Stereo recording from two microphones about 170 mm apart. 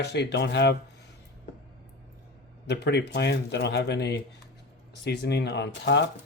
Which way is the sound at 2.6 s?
90° left.